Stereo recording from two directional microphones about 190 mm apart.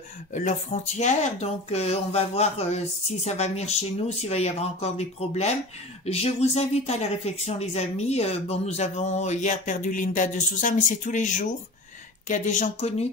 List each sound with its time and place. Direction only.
0.3 s speech: 40° left (ahead or behind)